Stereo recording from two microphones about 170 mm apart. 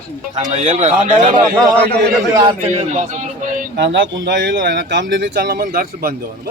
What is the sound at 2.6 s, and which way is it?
A man's voice, 40° right (ahead or behind).